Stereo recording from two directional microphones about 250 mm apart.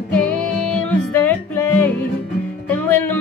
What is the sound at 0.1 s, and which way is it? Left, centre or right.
Music, centre.